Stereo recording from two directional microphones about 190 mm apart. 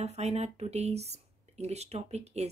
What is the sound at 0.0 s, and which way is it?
Speech, 35° right (ahead or behind).